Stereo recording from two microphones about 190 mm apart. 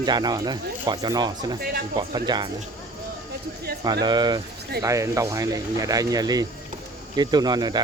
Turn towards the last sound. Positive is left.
turn(degrees=-20)  # may be behind; listen again after turning